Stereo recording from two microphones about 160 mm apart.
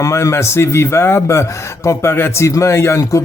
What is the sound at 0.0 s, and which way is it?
Speech, 20° left (ahead or behind).